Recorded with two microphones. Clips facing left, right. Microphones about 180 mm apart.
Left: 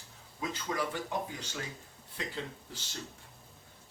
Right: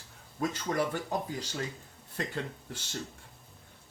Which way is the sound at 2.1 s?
50° right (ahead or behind).